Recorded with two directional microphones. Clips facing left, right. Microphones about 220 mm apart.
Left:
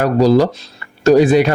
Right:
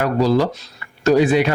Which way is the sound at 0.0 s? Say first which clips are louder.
Left 5 dB; 40° left (ahead or behind).